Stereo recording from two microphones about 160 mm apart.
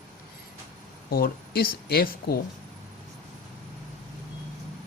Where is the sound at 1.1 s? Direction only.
65° left (ahead or behind).